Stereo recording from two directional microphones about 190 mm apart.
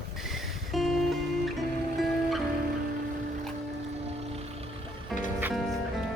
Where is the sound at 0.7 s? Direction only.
Centre (ahead or behind).